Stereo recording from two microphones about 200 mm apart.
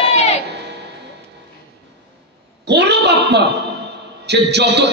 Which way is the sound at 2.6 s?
55° right (ahead or behind).